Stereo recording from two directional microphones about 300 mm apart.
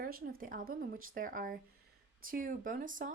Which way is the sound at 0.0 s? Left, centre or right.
Right.